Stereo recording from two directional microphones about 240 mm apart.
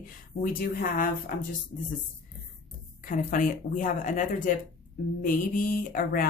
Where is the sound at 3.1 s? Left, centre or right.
Left.